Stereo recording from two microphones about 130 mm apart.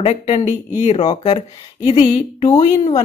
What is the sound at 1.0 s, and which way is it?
Speech, 40° left (ahead or behind).